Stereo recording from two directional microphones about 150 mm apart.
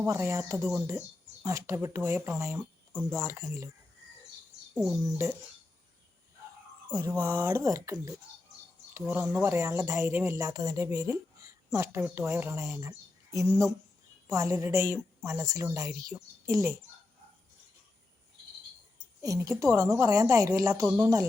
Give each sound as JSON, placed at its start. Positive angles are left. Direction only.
{"t": 0.0, "sound": "a woman's voice", "side_deg": -15}
{"t": 4.7, "sound": "speech", "side_deg": 0}
{"t": 4.9, "sound": "a woman's voice", "side_deg": -20}
{"t": 7.1, "sound": "a woman's voice", "side_deg": -15}
{"t": 19.2, "sound": "a woman's voice", "side_deg": -20}